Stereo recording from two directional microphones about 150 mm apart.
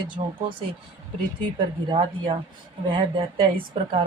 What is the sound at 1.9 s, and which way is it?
Speech, 35° right (ahead or behind).